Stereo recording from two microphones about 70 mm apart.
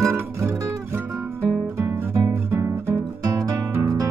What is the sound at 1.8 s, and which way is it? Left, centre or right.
Music, right.